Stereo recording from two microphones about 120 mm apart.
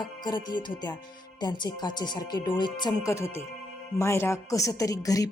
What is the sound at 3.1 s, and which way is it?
Speech, 25° left (ahead or behind).